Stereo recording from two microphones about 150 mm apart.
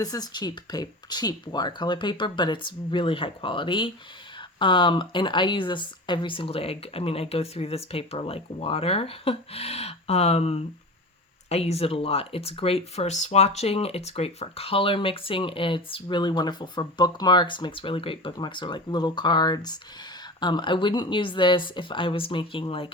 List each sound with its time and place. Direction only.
0.0 s speech: 25° left (ahead or behind)